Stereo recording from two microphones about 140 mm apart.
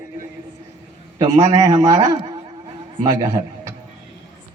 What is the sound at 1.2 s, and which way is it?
A man's voice, 25° right (ahead or behind).